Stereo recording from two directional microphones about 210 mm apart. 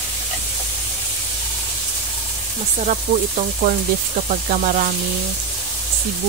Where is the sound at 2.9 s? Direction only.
40° right (ahead or behind).